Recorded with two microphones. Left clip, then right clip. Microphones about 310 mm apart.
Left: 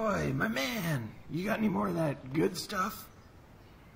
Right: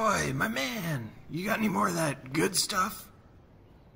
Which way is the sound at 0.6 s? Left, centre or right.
Centre.